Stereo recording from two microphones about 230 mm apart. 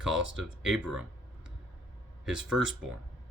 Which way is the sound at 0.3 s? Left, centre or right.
Centre.